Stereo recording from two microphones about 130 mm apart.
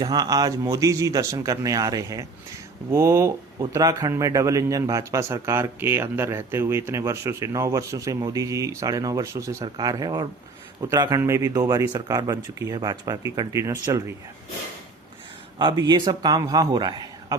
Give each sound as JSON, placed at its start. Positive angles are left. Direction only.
{"t": 0.0, "sound": "speech", "side_deg": -30}
{"t": 15.5, "sound": "a man's voice", "side_deg": -35}